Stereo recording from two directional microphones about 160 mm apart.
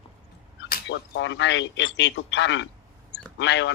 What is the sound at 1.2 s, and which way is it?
Speech, 90° left.